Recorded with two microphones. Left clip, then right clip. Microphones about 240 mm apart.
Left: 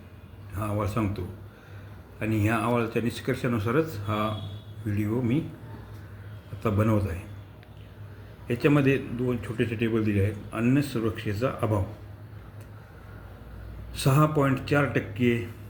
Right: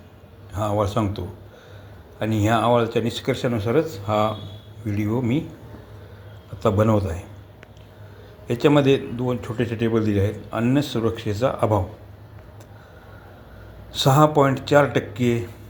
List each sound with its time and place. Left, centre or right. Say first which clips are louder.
0.5 s speech: right 8 dB; centre
6.6 s speech: right 7 dB; centre
8.4 s speech: right 6 dB; centre
13.9 s speech: right 8 dB; centre